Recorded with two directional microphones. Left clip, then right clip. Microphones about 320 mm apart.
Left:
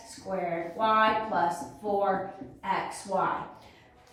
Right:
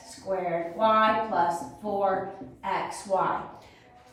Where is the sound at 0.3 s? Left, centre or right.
Centre.